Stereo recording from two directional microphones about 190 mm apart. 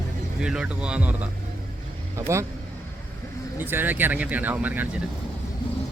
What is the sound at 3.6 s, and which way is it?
Speech, 10° right (ahead or behind).